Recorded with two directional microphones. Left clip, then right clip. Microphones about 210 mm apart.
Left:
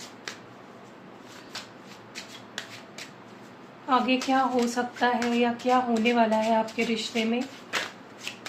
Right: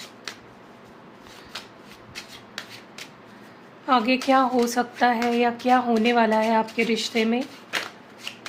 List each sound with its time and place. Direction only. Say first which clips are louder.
3.8 s speech: right 4 dB; 55° right (ahead or behind)